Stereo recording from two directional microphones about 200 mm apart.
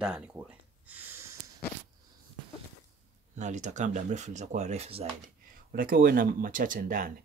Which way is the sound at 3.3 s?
35° right (ahead or behind).